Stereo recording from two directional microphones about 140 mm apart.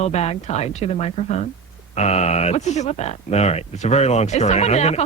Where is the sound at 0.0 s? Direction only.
50° left (ahead or behind).